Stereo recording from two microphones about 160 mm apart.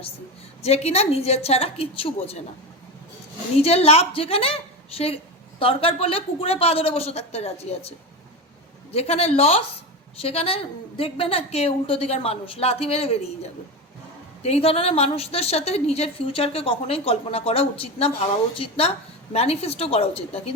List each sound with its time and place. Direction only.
0.6 s a woman's voice: 40° left (ahead or behind)
3.6 s a woman's voice: 40° left (ahead or behind)